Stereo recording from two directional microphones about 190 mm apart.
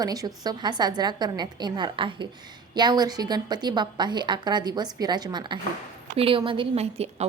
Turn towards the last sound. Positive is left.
turn(degrees=-35)  # may be behind; listen again after turning